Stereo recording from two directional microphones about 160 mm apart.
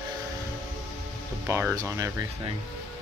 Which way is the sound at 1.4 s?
15° right (ahead or behind).